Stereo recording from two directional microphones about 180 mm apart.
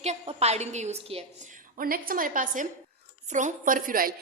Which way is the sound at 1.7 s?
55° right (ahead or behind).